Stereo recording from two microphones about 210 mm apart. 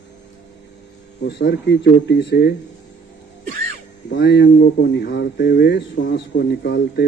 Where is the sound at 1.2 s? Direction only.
50° left (ahead or behind).